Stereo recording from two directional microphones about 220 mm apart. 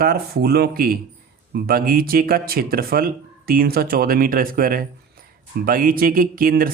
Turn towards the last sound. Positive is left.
turn(degrees=-40)  # may be behind; listen again after turning